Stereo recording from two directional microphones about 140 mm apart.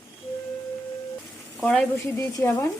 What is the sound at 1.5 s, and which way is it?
Frying, 5° left (ahead or behind).